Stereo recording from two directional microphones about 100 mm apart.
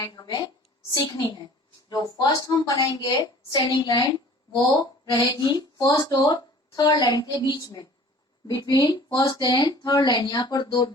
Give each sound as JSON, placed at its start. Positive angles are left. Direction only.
{"t": 0.0, "sound": "a woman's voice", "side_deg": 40}
{"t": 1.9, "sound": "a woman's voice", "side_deg": 40}